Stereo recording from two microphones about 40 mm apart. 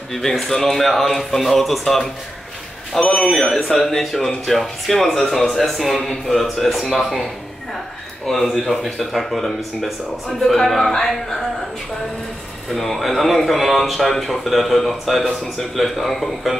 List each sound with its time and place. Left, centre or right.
0.1 s speech: centre
3.0 s speech: left
3.3 s speech: centre
8.3 s speech: centre
12.7 s speech: centre